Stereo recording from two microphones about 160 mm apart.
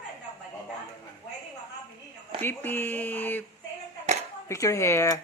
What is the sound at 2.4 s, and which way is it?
Speech, 10° left (ahead or behind).